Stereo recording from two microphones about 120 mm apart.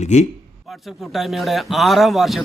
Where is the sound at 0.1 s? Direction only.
75° left (ahead or behind).